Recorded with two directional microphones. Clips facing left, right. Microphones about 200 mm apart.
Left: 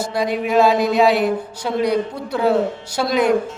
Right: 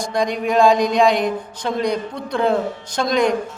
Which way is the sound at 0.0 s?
5° left (ahead or behind).